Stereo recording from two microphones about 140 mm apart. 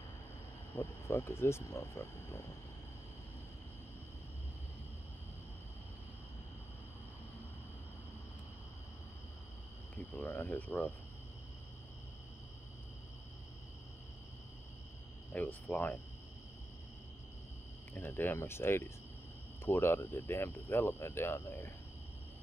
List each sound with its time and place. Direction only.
0.7 s speech: 20° left (ahead or behind)
10.2 s speech: 15° left (ahead or behind)
15.3 s speech: 10° left (ahead or behind)
17.9 s speech: 15° left (ahead or behind)